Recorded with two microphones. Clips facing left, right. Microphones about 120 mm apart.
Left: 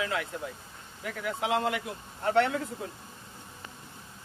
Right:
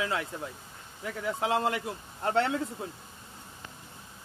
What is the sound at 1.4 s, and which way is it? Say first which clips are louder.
Speech: even; 35° right (ahead or behind).